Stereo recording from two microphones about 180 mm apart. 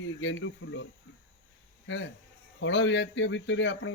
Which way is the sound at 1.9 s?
90° left.